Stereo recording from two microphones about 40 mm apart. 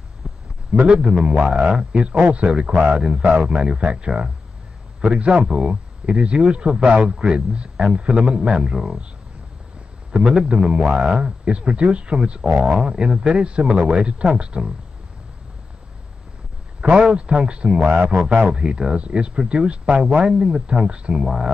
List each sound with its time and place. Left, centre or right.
0.2 s a sound: right
0.7 s speech: right
2.1 s speech: right
2.4 s speech: right
10.1 s speech: right
12.7 s speech: right
16.8 s speech: right